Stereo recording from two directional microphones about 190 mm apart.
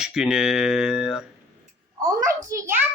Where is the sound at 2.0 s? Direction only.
15° right (ahead or behind).